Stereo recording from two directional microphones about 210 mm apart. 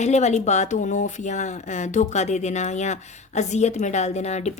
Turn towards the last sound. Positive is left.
turn(degrees=30)  # may be behind; listen again after turning